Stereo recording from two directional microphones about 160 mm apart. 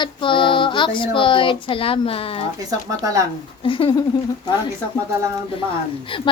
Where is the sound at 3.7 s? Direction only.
35° left (ahead or behind).